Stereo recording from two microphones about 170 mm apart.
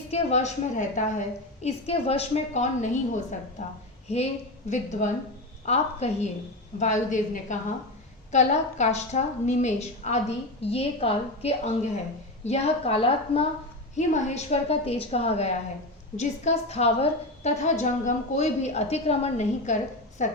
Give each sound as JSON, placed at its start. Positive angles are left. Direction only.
{"t": 0.1, "sound": "a woman's voice", "side_deg": 40}
{"t": 13.9, "sound": "a woman's voice", "side_deg": 45}